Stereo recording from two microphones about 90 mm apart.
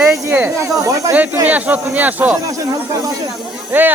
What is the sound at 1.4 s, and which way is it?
Speech, 15° right (ahead or behind).